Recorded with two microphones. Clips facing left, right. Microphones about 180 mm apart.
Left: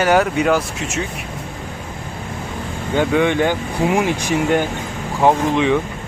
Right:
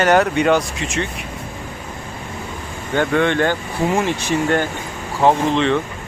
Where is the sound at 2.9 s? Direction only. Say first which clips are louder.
Left 1 dB; 10° left (ahead or behind).